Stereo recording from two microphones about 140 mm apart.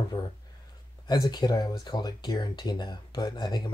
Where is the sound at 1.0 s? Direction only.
30° left (ahead or behind).